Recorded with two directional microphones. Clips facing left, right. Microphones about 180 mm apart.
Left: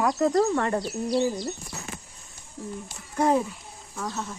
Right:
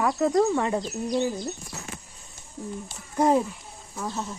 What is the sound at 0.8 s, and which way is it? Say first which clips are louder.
Speech: left 1 dB; 10° left (ahead or behind).